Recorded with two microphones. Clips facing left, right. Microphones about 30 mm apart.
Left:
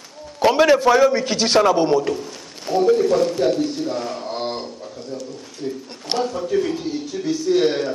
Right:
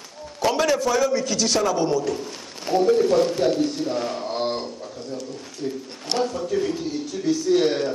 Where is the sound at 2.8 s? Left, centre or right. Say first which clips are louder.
Left 2 dB; centre.